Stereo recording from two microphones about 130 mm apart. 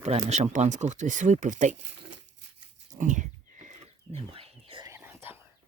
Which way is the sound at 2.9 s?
75° right (ahead or behind).